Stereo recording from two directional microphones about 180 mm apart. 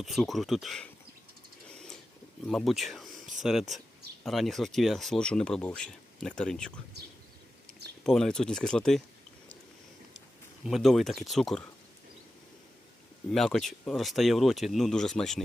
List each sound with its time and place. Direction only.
0.0 s speech: centre (ahead or behind)
1.7 s a sound: 5° left (ahead or behind)
2.5 s speech: centre (ahead or behind)
8.0 s speech: centre (ahead or behind)
10.7 s speech: centre (ahead or behind)
13.3 s speech: centre (ahead or behind)